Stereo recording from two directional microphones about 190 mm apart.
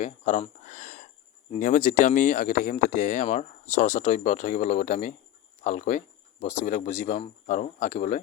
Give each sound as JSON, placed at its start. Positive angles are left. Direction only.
{"t": 0.0, "sound": "speech", "side_deg": 40}